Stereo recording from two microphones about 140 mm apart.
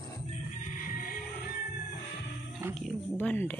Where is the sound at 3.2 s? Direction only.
15° left (ahead or behind).